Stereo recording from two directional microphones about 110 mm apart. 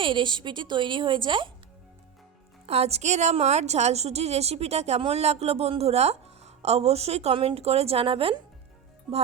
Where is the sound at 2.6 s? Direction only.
70° right (ahead or behind); by 8.4 s 55° right (ahead or behind).